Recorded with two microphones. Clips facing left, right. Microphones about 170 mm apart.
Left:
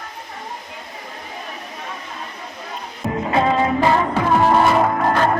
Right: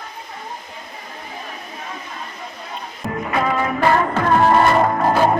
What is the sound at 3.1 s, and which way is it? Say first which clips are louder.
Music: left 3 dB; 25° left (ahead or behind).